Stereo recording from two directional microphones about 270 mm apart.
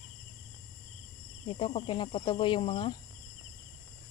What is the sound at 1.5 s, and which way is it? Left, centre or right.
Speech, centre.